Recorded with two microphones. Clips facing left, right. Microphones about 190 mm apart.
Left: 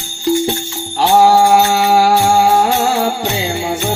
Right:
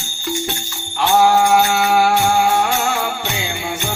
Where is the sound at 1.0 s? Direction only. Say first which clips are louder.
Left 4 dB; 35° left (ahead or behind).